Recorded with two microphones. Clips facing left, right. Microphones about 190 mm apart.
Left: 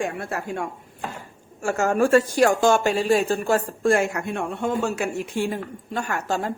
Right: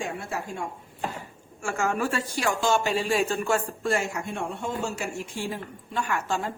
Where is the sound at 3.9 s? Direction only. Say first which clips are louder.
Left 5 dB; 60° left (ahead or behind).